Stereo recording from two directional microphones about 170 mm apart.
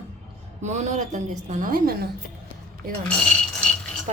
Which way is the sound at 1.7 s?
65° right (ahead or behind).